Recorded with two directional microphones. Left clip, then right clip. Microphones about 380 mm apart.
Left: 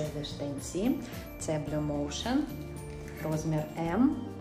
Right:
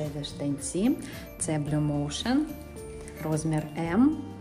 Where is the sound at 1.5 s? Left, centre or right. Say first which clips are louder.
Right 2 dB; right.